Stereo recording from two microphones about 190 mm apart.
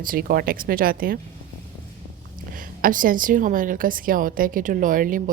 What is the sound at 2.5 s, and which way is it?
A woman's voice, 45° right (ahead or behind).